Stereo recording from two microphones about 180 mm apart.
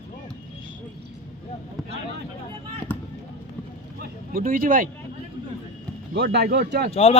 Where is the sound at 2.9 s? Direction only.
10° left (ahead or behind).